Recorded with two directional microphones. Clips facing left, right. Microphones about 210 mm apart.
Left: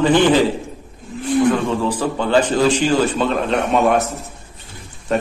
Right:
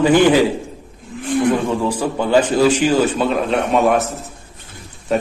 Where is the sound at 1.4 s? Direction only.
10° right (ahead or behind).